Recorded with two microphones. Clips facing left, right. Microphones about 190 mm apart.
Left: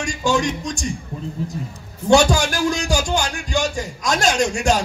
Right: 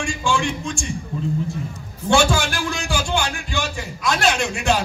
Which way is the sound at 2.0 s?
40° left (ahead or behind).